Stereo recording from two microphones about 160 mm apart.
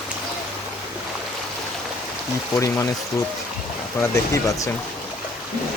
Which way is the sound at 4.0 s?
20° left (ahead or behind).